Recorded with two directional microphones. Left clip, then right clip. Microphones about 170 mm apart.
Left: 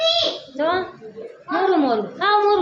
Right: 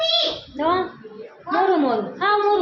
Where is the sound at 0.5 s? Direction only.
15° left (ahead or behind).